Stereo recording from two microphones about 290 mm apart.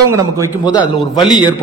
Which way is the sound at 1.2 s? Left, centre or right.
Centre.